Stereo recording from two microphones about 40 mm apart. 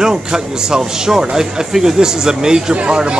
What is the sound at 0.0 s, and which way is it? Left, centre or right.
Speech, centre.